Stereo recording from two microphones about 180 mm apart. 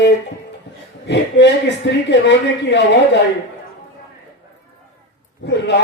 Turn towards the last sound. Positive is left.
turn(degrees=75)  # may be behind; listen again after turning